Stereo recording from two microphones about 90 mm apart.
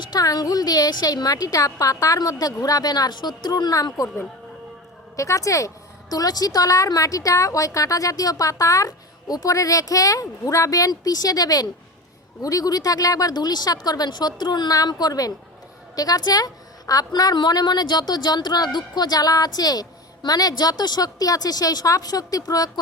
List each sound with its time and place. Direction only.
0.0 s a woman's voice: 45° left (ahead or behind)
5.1 s a woman's voice: 35° left (ahead or behind)